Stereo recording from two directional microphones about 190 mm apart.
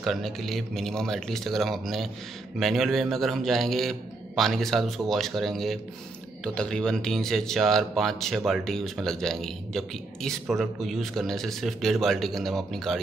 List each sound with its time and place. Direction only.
0.0 s a man's voice: centre (ahead or behind)